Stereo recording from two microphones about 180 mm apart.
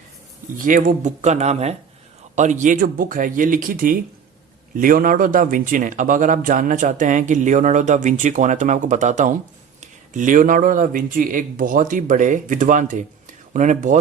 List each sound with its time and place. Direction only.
0.5 s a man's voice: 50° right (ahead or behind)